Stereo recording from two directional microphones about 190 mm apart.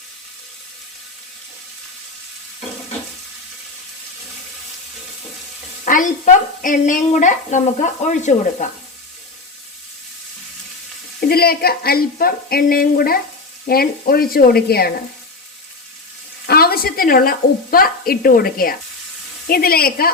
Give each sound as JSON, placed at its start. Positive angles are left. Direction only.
{"t": 5.8, "sound": "a woman's voice", "side_deg": 45}
{"t": 11.2, "sound": "a woman's voice", "side_deg": 55}
{"t": 16.5, "sound": "a woman's voice", "side_deg": 55}